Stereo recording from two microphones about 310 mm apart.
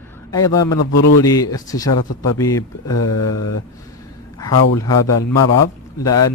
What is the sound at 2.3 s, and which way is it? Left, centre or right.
Speech, centre.